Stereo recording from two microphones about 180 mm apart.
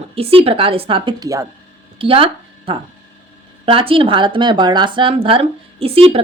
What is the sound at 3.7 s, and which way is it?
A woman's voice, 30° right (ahead or behind).